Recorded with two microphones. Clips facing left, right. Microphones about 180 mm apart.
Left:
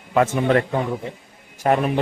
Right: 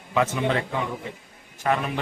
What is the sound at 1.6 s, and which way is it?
Speech, 40° left (ahead or behind).